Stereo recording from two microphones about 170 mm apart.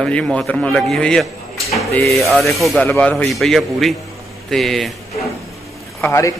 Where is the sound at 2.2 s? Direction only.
Centre (ahead or behind).